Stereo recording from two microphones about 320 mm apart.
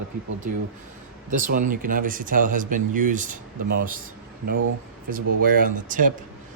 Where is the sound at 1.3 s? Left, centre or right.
Right.